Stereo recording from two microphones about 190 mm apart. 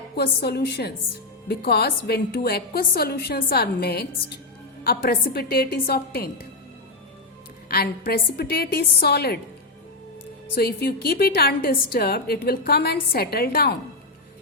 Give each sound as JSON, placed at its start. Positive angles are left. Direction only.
{"t": 0.2, "sound": "a woman's voice", "side_deg": 60}
{"t": 7.7, "sound": "a woman's voice", "side_deg": 50}
{"t": 10.5, "sound": "a woman's voice", "side_deg": 55}